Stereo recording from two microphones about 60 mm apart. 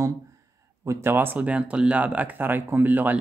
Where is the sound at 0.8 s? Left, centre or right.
Right.